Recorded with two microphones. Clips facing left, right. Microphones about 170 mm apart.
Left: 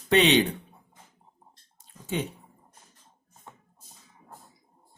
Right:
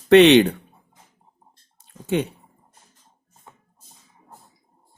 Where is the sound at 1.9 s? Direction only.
70° right (ahead or behind).